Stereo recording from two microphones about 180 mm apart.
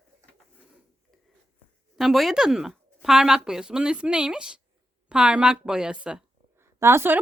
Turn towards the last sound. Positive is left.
turn(degrees=-15)  # may be behind; listen again after turning